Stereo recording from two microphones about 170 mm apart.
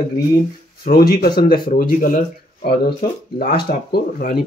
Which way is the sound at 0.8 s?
60° left (ahead or behind).